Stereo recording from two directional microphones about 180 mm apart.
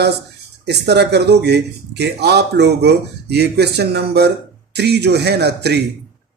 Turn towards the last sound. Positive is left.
turn(degrees=-65)  # may be behind; listen again after turning